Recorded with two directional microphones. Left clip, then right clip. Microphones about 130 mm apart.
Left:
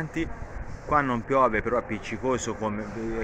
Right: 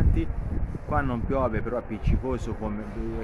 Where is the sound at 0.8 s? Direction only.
10° right (ahead or behind).